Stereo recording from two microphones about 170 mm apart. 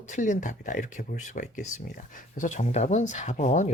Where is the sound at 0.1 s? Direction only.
45° left (ahead or behind).